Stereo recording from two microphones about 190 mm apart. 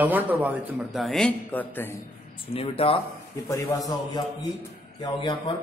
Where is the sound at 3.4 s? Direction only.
20° left (ahead or behind).